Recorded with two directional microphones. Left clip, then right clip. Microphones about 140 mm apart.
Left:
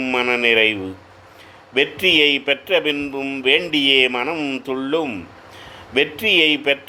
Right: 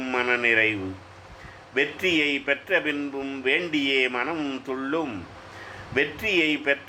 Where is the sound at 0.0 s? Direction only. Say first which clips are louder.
Left 5 dB; 45° left (ahead or behind).